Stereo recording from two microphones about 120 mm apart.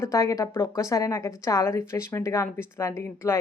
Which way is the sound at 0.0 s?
25° left (ahead or behind).